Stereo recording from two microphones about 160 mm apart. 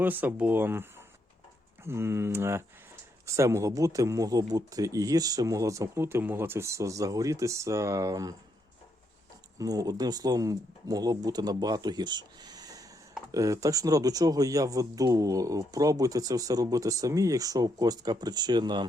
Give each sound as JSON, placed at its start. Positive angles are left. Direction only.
{"t": 0.0, "sound": "speech", "side_deg": -10}
{"t": 9.6, "sound": "speech", "side_deg": -25}